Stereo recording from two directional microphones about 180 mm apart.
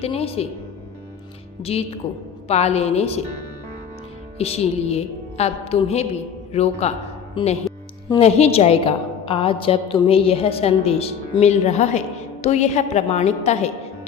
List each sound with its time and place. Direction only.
0.0 s a woman's voice: 35° left (ahead or behind)
1.6 s a woman's voice: 35° left (ahead or behind)
4.4 s a woman's voice: 35° left (ahead or behind)